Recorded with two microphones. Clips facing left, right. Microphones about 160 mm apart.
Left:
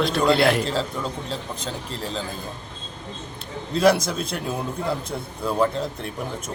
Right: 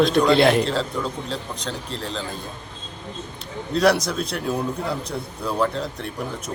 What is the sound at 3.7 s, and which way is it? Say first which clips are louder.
A man's voice: even; centre (ahead or behind).